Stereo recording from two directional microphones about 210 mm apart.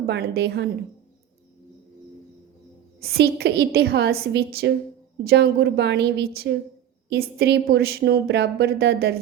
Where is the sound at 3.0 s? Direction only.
50° right (ahead or behind).